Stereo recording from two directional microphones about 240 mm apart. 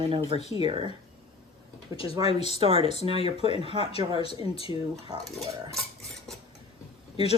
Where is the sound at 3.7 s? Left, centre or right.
Left.